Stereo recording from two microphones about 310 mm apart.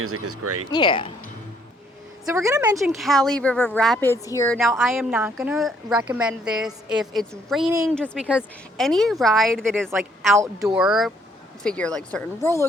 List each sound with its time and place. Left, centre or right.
0.0 s speech: right
0.7 s speech: centre
2.3 s a woman's voice: centre
2.9 s a woman's voice: centre